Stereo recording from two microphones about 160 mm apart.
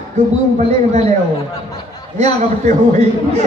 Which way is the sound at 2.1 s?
45° right (ahead or behind).